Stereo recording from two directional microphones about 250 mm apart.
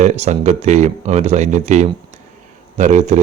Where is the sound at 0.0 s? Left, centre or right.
Right.